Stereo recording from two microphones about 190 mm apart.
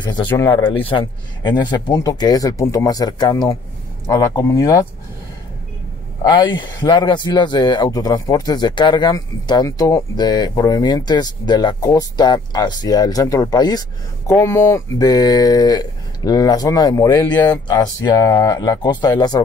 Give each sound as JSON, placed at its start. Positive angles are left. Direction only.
{"t": 0.0, "sound": "speech", "side_deg": 25}
{"t": 0.3, "sound": "speech", "side_deg": 10}
{"t": 0.7, "sound": "speech", "side_deg": 25}
{"t": 6.2, "sound": "speech", "side_deg": 25}